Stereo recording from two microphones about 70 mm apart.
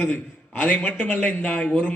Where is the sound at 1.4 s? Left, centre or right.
Centre.